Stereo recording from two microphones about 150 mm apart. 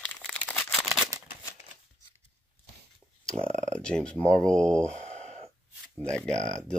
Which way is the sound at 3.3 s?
50° right (ahead or behind).